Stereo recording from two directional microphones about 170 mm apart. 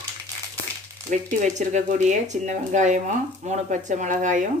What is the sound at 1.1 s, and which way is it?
Speech, 45° right (ahead or behind).